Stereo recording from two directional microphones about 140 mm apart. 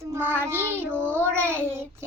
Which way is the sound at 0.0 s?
15° right (ahead or behind).